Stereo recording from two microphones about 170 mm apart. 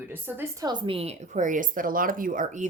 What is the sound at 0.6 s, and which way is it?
A woman's voice, 30° right (ahead or behind).